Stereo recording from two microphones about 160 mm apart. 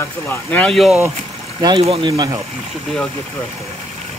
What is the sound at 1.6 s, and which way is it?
Speech, 25° right (ahead or behind).